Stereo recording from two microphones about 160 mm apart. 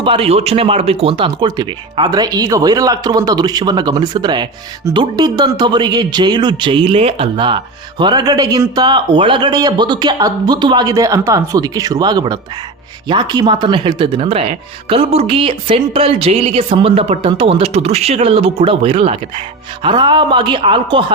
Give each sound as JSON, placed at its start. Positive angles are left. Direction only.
{"t": 0.0, "sound": "speech", "side_deg": -35}